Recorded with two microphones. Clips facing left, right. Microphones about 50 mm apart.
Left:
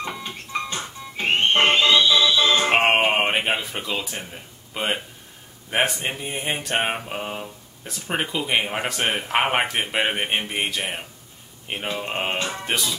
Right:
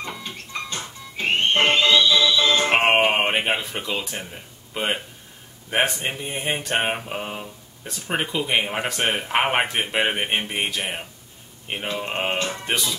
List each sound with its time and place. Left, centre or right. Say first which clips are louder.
0.0 s music: left 2 dB; centre
2.7 s music: even; centre
4.7 s speech: even; centre